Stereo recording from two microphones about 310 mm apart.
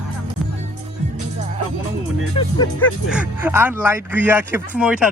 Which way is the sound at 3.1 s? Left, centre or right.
Centre.